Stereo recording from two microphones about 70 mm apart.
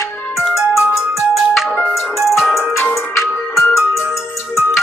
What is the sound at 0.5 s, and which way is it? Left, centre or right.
Ringtone, centre.